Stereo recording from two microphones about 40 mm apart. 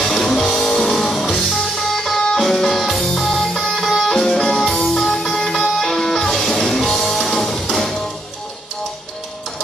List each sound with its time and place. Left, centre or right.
0.0 s music: centre
4.1 s music: centre